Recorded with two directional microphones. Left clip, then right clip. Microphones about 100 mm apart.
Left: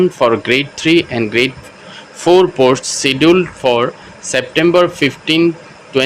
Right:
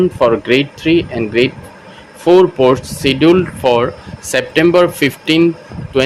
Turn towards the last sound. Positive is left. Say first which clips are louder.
# right 1 dB
turn(degrees=-5)  # may be behind; listen again after turning